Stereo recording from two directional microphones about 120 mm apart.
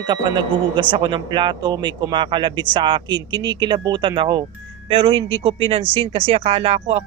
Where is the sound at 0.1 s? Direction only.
35° right (ahead or behind).